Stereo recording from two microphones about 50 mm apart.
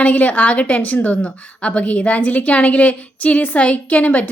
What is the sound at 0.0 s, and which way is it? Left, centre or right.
A woman's voice, left.